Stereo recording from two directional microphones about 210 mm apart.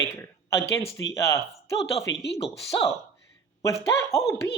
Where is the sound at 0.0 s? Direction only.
15° left (ahead or behind).